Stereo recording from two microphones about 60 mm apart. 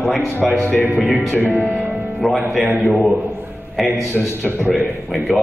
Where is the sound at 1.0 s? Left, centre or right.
Centre.